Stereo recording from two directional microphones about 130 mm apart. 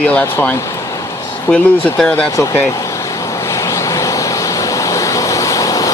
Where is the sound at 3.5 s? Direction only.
25° left (ahead or behind).